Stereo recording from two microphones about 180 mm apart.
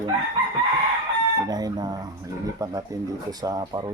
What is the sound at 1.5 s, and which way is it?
Speech, 20° right (ahead or behind).